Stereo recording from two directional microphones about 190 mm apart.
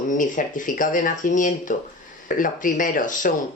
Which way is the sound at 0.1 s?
45° left (ahead or behind).